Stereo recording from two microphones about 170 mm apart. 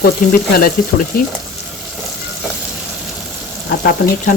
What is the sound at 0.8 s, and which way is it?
Frying, 50° left (ahead or behind).